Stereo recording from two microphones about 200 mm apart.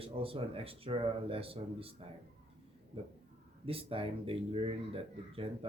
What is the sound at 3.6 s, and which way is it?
Speech, 25° right (ahead or behind).